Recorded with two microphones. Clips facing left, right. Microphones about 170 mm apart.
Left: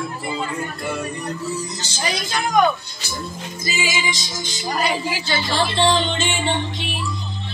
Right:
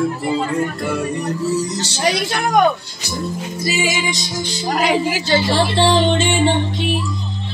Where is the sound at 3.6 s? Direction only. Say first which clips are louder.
Right 4 dB; 65° right (ahead or behind); by 5.0 s 80° right.